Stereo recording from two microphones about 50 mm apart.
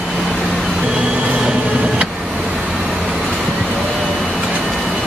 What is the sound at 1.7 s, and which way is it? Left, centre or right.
Vehicle, centre.